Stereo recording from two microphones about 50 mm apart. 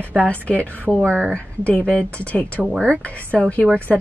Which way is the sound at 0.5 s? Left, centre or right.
Left.